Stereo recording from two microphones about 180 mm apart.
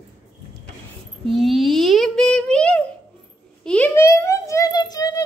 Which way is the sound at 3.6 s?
5° left (ahead or behind).